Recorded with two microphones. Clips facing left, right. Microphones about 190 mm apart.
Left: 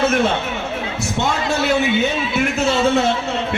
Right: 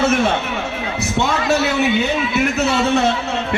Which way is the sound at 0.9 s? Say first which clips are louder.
Right 3 dB; 65° right (ahead or behind).